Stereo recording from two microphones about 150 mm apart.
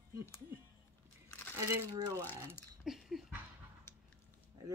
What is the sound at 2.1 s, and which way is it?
Speech, 15° left (ahead or behind).